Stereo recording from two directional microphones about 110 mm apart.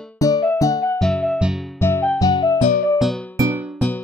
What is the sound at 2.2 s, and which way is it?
Music, 35° left (ahead or behind).